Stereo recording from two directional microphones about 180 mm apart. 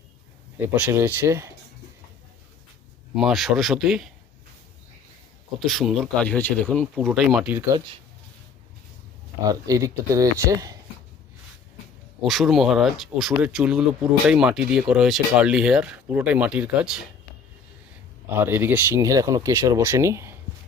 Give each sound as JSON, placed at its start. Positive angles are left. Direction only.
{"t": 0.7, "sound": "speech", "side_deg": -15}
{"t": 3.2, "sound": "speech", "side_deg": 0}
{"t": 5.5, "sound": "speech", "side_deg": 0}
{"t": 7.3, "sound": "speech", "side_deg": -5}
{"t": 9.4, "sound": "speech", "side_deg": -20}
{"t": 12.2, "sound": "speech", "side_deg": 0}
{"t": 18.3, "sound": "speech", "side_deg": -10}